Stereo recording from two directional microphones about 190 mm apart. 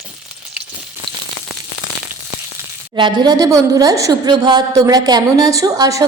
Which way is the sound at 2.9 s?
25° right (ahead or behind).